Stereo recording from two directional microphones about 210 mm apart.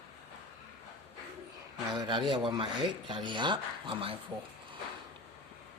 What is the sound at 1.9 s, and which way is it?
Speech, 20° right (ahead or behind).